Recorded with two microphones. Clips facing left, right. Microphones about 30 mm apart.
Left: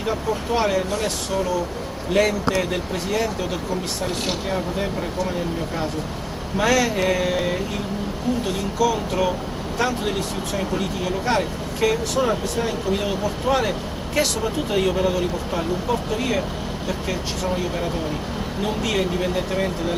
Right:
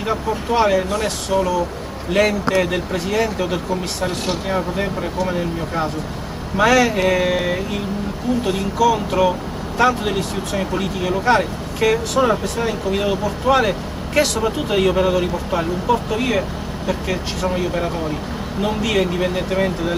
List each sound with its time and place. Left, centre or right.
0.0 s speech: centre
4.5 s speech: centre